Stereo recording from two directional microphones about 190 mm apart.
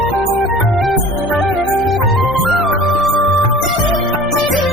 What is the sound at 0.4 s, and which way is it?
Music, centre (ahead or behind).